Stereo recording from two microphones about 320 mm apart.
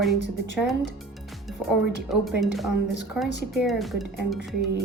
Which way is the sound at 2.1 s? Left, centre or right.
Centre.